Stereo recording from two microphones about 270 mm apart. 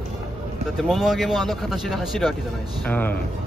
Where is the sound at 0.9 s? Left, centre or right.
Centre.